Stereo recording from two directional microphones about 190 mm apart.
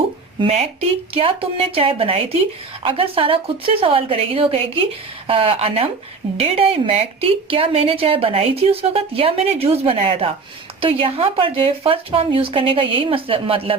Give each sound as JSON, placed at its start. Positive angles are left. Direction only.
{"t": 0.3, "sound": "a woman's voice", "side_deg": -30}